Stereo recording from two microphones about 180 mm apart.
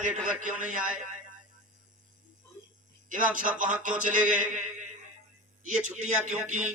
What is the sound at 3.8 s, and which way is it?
A man's voice, 45° right (ahead or behind).